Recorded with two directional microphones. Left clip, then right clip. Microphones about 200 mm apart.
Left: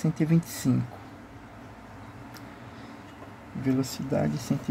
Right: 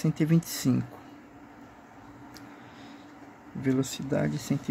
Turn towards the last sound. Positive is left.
turn(degrees=-10)  # may be behind; listen again after turning